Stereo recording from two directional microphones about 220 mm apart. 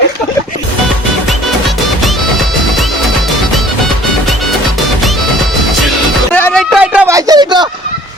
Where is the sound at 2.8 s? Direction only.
Centre (ahead or behind).